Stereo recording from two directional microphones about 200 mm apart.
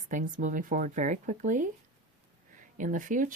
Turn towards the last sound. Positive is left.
turn(degrees=-40)  # may be behind; listen again after turning